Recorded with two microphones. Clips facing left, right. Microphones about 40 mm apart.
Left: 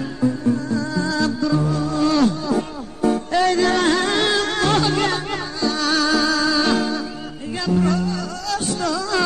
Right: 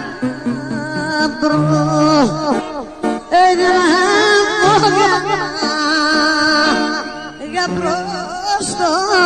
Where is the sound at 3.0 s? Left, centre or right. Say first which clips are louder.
Right 6 dB; right.